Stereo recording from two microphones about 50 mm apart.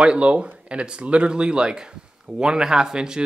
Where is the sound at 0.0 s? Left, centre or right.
Right.